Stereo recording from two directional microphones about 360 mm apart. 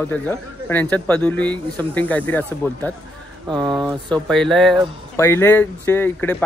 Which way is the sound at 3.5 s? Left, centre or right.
Centre.